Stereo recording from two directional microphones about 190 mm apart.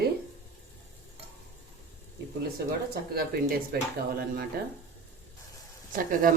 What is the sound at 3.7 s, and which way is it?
Speech, 55° right (ahead or behind).